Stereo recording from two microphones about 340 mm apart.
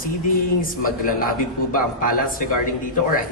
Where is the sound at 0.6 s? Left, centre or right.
Left.